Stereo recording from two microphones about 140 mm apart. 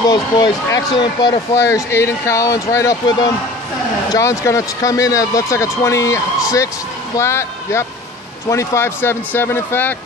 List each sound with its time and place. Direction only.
0.0 s speech: 30° left (ahead or behind)
1.5 s speech: 20° left (ahead or behind)